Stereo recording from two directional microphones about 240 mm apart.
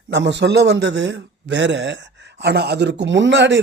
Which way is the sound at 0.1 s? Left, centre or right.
Right.